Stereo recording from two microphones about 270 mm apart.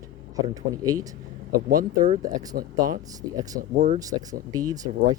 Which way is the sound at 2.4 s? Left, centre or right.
Centre.